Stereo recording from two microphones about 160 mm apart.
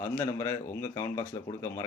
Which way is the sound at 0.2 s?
15° left (ahead or behind).